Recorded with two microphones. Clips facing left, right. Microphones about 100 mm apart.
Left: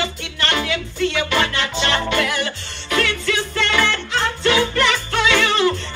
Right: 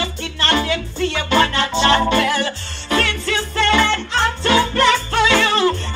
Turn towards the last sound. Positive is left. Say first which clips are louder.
# right 1 dB
turn(degrees=-30)  # may be behind; listen again after turning